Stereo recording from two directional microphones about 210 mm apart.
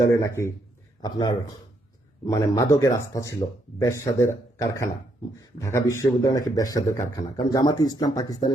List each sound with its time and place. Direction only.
0.2 s speech: 15° left (ahead or behind)